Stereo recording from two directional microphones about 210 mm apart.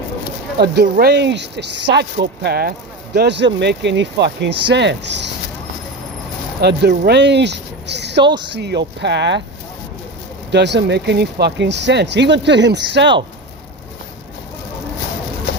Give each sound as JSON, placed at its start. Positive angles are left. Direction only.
{"t": 0.6, "sound": "speech", "side_deg": -50}
{"t": 6.6, "sound": "speech", "side_deg": -50}
{"t": 8.2, "sound": "speech", "side_deg": -20}
{"t": 8.5, "sound": "speech", "side_deg": -55}
{"t": 10.5, "sound": "speech", "side_deg": -55}